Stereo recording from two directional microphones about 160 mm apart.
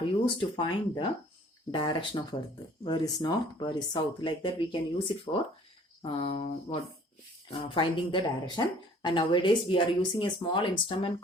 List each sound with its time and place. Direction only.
0.0 s speech: 30° left (ahead or behind)